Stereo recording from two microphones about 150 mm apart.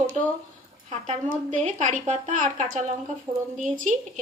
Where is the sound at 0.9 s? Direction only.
55° right (ahead or behind).